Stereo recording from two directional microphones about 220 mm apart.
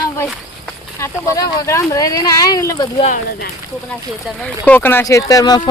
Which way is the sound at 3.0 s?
40° left (ahead or behind).